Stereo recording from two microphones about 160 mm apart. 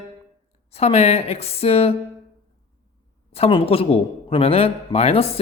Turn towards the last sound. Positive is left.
turn(degrees=40)  # may be behind; listen again after turning